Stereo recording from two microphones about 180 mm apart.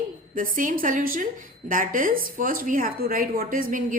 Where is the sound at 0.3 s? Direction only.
50° right (ahead or behind).